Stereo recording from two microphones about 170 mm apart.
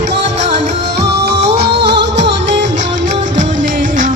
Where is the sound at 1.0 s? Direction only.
75° right (ahead or behind); by 2.6 s 90° right.